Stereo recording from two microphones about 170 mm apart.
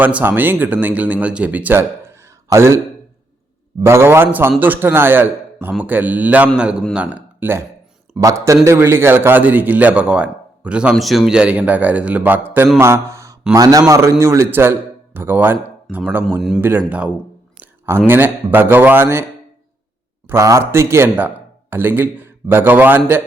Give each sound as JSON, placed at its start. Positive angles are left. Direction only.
{"t": 0.0, "sound": "a man's voice", "side_deg": -10}
{"t": 15.9, "sound": "a man's voice", "side_deg": 0}
{"t": 16.6, "sound": "a man's voice", "side_deg": -10}
{"t": 20.3, "sound": "a man's voice", "side_deg": -15}